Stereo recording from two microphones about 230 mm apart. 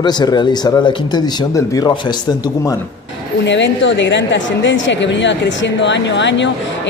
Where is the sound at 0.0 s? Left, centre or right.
Centre.